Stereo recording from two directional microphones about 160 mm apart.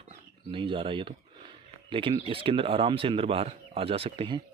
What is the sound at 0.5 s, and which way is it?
Speech, 35° right (ahead or behind).